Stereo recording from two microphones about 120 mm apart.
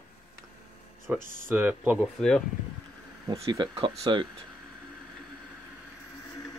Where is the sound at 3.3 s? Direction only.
40° right (ahead or behind).